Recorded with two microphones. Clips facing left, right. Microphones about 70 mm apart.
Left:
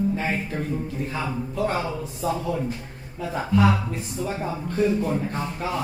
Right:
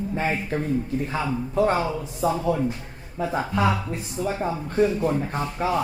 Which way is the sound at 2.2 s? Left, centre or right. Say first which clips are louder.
Right 3 dB; right.